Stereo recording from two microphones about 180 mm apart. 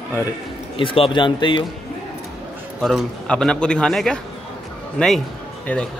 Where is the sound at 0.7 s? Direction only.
30° left (ahead or behind).